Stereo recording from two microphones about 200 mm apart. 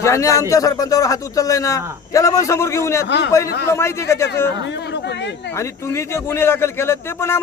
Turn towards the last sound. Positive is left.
turn(degrees=15)  # may be behind; listen again after turning